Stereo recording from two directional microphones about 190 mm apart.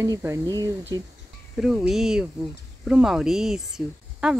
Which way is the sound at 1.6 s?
Centre (ahead or behind).